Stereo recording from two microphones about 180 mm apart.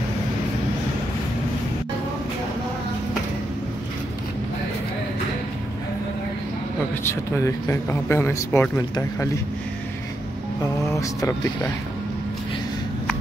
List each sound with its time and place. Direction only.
7.3 s speech: 15° left (ahead or behind)
10.6 s speech: 20° left (ahead or behind)